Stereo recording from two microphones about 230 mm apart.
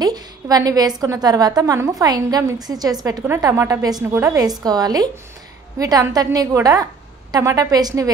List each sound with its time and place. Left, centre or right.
0.0 s a woman's voice: centre